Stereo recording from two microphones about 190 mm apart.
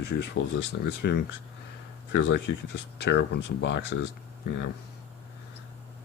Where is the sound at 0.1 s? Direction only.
50° left (ahead or behind); by 3.9 s 65° left (ahead or behind).